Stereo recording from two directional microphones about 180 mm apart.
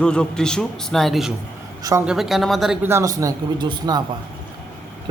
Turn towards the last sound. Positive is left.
turn(degrees=-25)  # may be behind; listen again after turning